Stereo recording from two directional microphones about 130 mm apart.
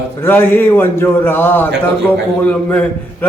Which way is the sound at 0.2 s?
15° left (ahead or behind).